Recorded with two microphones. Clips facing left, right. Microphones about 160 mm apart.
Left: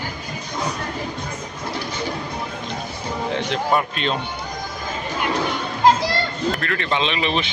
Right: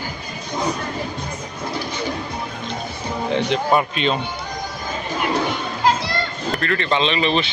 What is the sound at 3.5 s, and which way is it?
Speech, 5° right (ahead or behind).